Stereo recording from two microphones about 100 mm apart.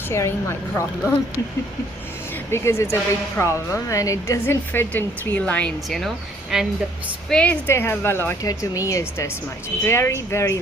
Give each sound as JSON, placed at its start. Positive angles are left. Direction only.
{"t": 0.1, "sound": "speech", "side_deg": 25}
{"t": 2.5, "sound": "speech", "side_deg": 25}
{"t": 7.3, "sound": "a woman's voice", "side_deg": 10}
{"t": 7.7, "sound": "speech", "side_deg": 25}
{"t": 8.4, "sound": "speech", "side_deg": 35}